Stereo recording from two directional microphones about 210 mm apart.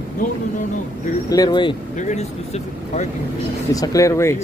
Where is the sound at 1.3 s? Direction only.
20° left (ahead or behind).